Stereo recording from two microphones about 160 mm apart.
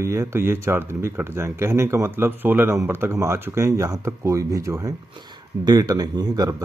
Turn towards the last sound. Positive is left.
turn(degrees=-25)  # may be behind; listen again after turning